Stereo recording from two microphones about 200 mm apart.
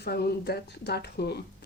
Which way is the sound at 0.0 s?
50° left (ahead or behind).